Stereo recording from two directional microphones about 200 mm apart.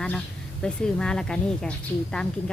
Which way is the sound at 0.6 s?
5° left (ahead or behind).